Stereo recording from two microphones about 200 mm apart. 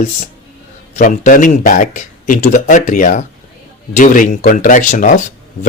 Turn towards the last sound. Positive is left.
turn(degrees=40)  # may be behind; listen again after turning